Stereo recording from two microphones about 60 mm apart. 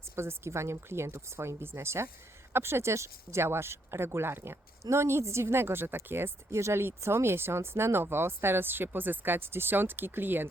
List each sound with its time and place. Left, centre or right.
0.2 s speech: right
4.8 s speech: right
6.5 s speech: right